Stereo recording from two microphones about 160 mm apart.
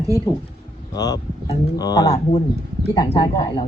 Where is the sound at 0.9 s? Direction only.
25° left (ahead or behind).